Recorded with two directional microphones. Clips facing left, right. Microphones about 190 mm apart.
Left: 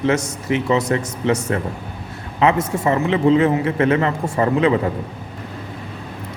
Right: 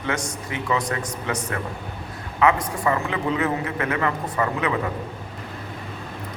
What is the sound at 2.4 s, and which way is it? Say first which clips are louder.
A man's voice: left 3 dB; 25° left (ahead or behind).